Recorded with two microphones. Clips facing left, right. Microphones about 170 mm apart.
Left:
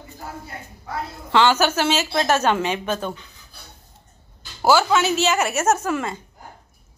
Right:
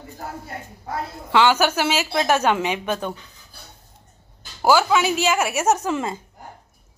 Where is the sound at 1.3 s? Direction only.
10° right (ahead or behind).